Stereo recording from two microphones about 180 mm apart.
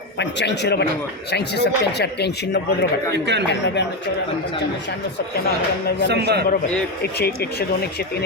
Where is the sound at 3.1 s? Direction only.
70° right (ahead or behind).